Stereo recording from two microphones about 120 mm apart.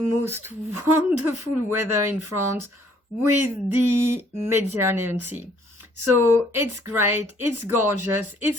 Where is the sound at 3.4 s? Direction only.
20° right (ahead or behind).